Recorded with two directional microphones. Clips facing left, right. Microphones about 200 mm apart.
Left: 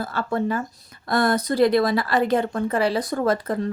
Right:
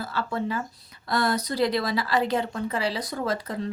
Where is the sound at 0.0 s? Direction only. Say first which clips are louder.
Left 5 dB; 50° left (ahead or behind).